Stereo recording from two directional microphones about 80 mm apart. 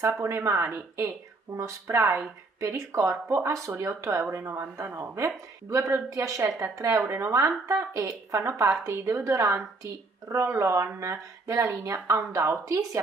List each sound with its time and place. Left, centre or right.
0.2 s speech: right